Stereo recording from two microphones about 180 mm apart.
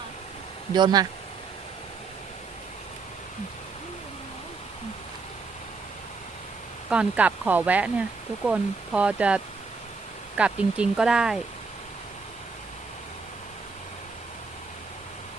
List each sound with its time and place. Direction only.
0.7 s speech: 25° right (ahead or behind)
6.9 s speech: 5° right (ahead or behind)